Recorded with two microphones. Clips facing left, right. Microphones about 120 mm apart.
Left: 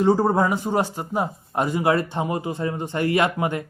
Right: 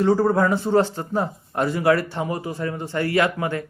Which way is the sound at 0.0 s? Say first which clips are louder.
Even; 20° left (ahead or behind).